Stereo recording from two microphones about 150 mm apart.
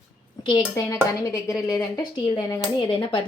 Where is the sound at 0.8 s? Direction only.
20° left (ahead or behind).